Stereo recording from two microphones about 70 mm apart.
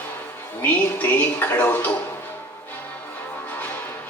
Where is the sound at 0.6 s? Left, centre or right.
Left.